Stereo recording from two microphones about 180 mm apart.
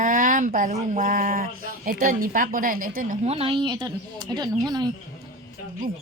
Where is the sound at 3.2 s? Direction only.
30° right (ahead or behind).